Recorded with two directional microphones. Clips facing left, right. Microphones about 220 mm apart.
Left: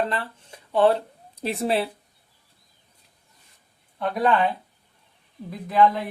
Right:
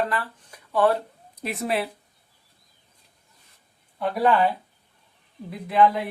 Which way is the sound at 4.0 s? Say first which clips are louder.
Right 1 dB; 5° right (ahead or behind).